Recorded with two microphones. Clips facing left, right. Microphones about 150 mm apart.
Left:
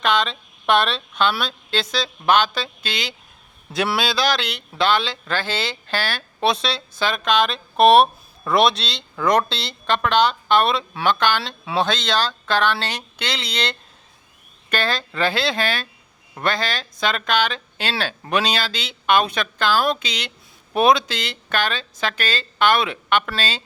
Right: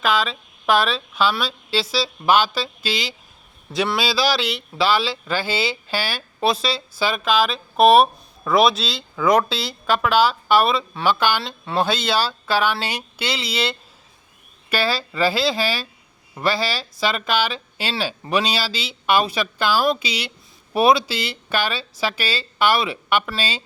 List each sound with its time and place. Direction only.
0.0 s speech: 5° right (ahead or behind)